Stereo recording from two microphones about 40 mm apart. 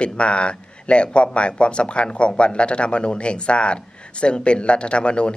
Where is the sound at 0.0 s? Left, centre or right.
Left.